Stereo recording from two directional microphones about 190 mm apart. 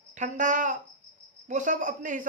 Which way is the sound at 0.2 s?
40° right (ahead or behind).